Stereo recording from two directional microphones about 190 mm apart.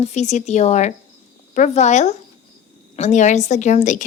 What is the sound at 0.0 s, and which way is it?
A woman's voice, 35° left (ahead or behind).